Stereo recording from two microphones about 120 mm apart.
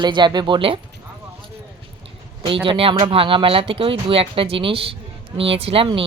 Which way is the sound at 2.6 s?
45° right (ahead or behind).